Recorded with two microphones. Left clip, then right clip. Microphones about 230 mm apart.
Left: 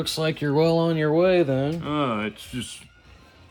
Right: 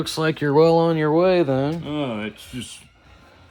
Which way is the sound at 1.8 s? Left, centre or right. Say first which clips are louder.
Left 2 dB; left.